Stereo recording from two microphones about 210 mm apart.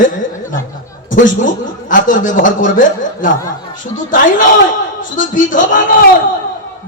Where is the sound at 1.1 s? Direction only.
40° left (ahead or behind).